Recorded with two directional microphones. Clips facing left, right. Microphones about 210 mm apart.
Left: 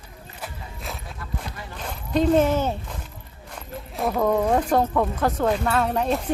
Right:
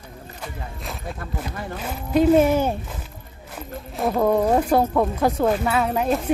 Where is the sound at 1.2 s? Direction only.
50° right (ahead or behind).